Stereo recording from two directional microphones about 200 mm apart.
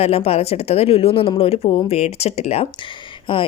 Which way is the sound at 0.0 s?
30° left (ahead or behind).